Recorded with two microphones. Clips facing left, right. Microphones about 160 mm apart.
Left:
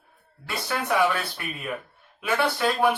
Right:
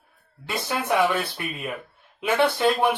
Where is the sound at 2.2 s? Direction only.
20° right (ahead or behind).